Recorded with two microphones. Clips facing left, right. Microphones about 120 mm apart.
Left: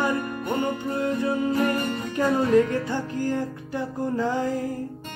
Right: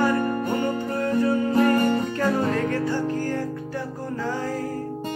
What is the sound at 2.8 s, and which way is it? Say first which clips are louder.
Music: right 2 dB; 20° left (ahead or behind).